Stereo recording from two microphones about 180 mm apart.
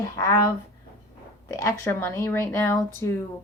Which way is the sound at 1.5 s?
15° left (ahead or behind).